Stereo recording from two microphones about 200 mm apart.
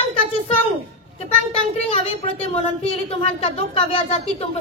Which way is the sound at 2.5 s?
30° left (ahead or behind).